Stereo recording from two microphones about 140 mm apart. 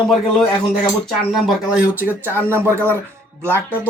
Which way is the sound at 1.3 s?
5° right (ahead or behind).